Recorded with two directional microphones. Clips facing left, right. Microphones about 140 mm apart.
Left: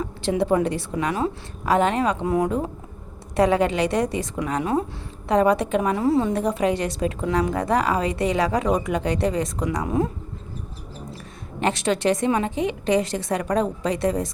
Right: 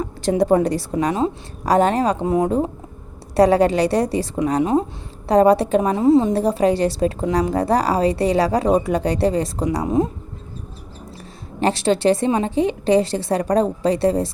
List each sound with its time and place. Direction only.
0.0 s a woman's voice: 40° right (ahead or behind)
3.3 s a woman's voice: 35° right (ahead or behind)
4.6 s speech: 25° right (ahead or behind)
5.3 s a woman's voice: 35° right (ahead or behind)
11.6 s a woman's voice: 30° right (ahead or behind)